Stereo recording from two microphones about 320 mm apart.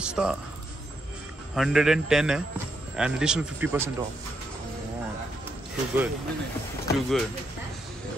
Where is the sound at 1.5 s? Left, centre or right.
Centre.